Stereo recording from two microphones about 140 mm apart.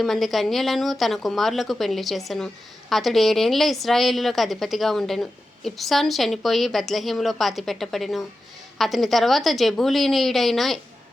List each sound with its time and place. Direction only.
0.0 s a woman's voice: centre (ahead or behind)